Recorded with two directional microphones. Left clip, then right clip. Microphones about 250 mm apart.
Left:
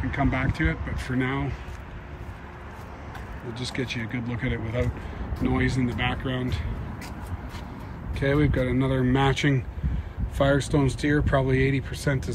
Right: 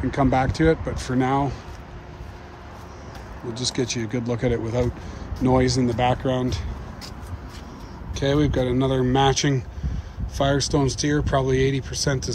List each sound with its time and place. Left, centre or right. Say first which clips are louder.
0.1 s speech: right 7 dB; centre
3.5 s speech: right 5 dB; centre
8.2 s speech: right 3 dB; centre